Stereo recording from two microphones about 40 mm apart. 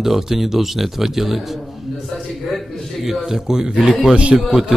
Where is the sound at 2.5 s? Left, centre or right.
Centre.